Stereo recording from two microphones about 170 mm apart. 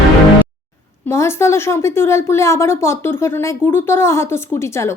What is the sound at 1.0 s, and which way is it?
A woman's voice, 15° left (ahead or behind).